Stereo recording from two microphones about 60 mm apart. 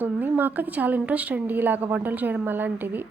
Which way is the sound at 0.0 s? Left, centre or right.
Right.